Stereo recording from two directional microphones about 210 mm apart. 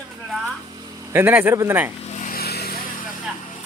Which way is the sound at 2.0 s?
35° left (ahead or behind).